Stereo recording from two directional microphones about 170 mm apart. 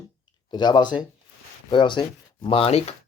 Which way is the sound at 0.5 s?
25° left (ahead or behind).